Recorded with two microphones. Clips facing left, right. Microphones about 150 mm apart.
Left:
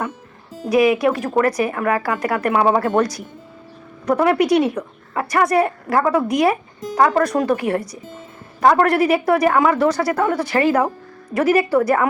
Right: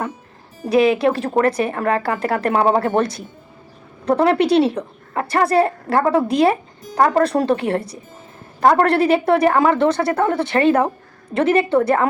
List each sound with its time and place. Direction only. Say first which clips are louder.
0.7 s speech: even; 30° right (ahead or behind)